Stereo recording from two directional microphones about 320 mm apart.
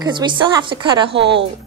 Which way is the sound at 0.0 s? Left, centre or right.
Centre.